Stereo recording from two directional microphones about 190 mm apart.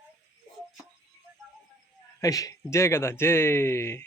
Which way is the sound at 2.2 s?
15° left (ahead or behind).